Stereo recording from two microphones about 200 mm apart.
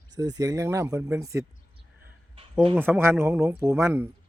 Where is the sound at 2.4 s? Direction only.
30° right (ahead or behind).